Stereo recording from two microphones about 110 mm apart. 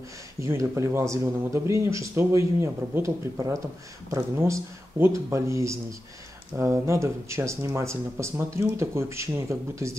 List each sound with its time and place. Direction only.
0.4 s speech: 25° right (ahead or behind)